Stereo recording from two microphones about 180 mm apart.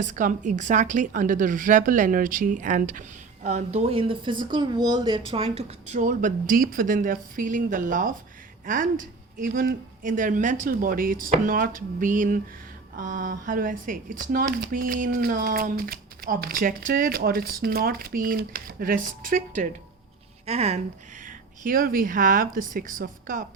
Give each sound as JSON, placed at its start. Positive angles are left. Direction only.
{"t": 0.0, "sound": "speech", "side_deg": -45}
{"t": 21.2, "sound": "speech", "side_deg": -50}